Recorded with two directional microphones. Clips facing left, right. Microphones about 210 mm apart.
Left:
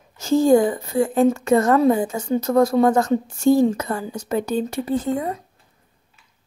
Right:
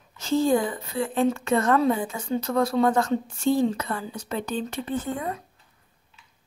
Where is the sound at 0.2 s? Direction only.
45° left (ahead or behind).